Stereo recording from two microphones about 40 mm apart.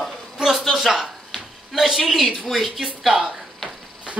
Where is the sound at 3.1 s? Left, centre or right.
Right.